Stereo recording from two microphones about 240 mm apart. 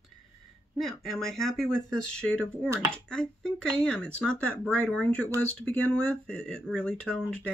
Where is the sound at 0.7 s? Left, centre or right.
Centre.